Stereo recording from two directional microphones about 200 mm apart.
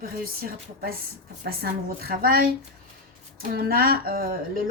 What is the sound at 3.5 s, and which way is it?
Speech, 45° right (ahead or behind).